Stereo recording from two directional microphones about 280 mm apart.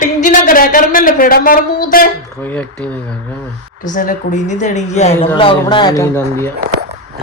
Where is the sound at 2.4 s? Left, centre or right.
Centre.